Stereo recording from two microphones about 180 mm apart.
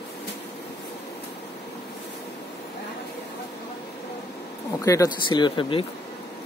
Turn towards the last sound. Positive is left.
turn(degrees=30)  # may be behind; listen again after turning